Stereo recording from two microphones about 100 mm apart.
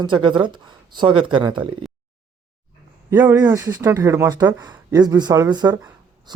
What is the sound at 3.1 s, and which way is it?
Speech, 20° right (ahead or behind).